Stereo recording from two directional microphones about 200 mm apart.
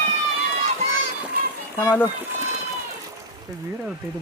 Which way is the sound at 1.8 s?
10° left (ahead or behind).